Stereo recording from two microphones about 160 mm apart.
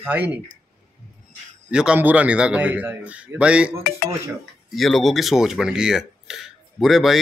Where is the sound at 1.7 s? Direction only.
5° right (ahead or behind).